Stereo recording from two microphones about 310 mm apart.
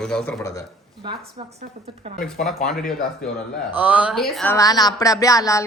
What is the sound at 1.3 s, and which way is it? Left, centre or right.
Speech, centre.